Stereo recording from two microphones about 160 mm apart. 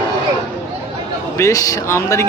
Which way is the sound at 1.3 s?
20° left (ahead or behind).